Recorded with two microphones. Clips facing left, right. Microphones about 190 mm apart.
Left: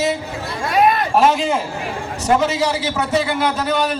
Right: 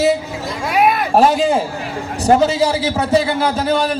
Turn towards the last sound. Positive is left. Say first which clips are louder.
# right 2 dB
turn(degrees=-35)  # may be behind; listen again after turning